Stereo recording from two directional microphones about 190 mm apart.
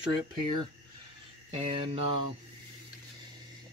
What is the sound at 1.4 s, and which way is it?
Speech, 30° right (ahead or behind).